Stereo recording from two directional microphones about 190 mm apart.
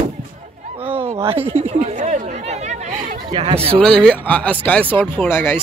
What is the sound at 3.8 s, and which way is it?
Speech, 5° left (ahead or behind).